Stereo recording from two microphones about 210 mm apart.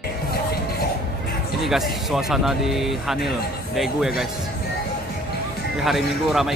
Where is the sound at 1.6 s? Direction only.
Centre (ahead or behind).